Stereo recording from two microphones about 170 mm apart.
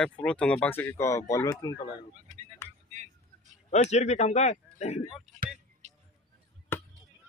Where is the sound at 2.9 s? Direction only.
45° right (ahead or behind).